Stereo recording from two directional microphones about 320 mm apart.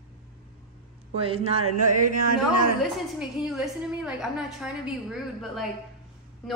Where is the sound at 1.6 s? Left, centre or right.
Right.